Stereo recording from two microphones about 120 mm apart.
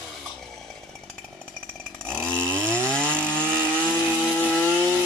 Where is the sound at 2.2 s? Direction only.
10° left (ahead or behind).